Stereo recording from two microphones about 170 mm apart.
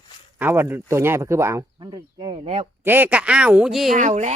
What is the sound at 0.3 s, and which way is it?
Speech, 10° right (ahead or behind).